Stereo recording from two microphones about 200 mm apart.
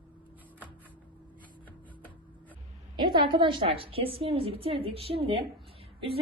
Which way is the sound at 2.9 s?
20° right (ahead or behind).